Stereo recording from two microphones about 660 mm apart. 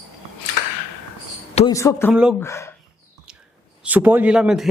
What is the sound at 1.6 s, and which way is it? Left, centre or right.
Speech, centre.